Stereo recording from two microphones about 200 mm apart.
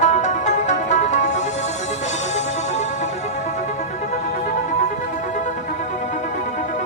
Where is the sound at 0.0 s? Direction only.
35° left (ahead or behind).